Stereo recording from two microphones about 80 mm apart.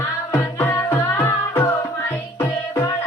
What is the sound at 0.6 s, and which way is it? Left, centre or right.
Music, left.